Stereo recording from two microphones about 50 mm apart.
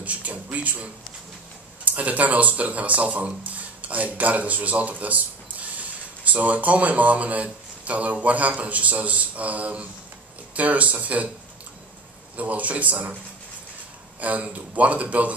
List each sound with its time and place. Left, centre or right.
0.0 s speech: right
1.9 s a man's voice: right
12.4 s a man's voice: right
14.2 s a man's voice: right